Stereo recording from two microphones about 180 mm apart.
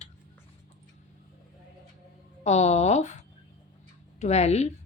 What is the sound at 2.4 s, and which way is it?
Speech, 40° left (ahead or behind).